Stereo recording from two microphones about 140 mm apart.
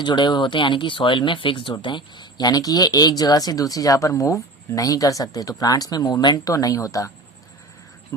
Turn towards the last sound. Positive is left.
turn(degrees=25)  # may be behind; listen again after turning